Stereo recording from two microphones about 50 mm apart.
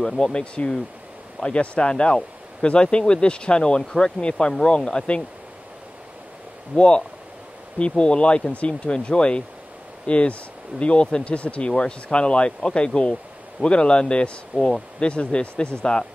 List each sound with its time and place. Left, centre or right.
0.2 s speech: left
6.7 s speech: centre